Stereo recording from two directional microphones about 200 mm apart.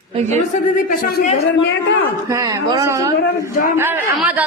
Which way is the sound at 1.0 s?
50° left (ahead or behind).